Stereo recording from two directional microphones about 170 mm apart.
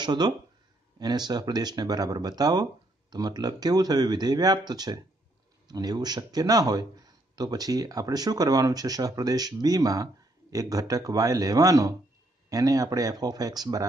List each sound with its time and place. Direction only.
0.0 s speech: 25° right (ahead or behind)